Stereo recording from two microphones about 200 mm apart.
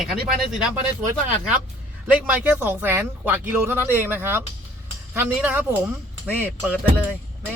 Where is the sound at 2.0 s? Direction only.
5° right (ahead or behind).